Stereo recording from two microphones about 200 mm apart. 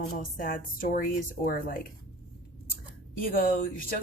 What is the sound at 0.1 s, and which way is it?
Speech, 45° left (ahead or behind).